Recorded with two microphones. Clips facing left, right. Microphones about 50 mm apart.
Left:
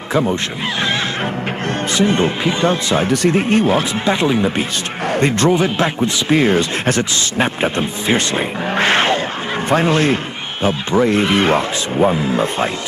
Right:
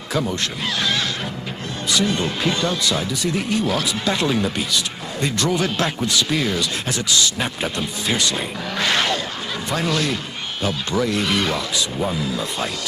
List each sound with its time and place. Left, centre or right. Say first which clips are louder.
0.1 s speech: left 6 dB; left
1.9 s speech: left 5 dB; left
3.1 s speech: left 9 dB; left
3.3 s speech: left 7 dB; left
5.1 s a man's voice: left 7 dB; left
5.6 s speech: left 5 dB; left